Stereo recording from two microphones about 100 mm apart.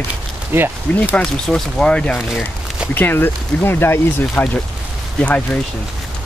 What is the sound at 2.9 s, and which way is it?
Speech, 20° left (ahead or behind).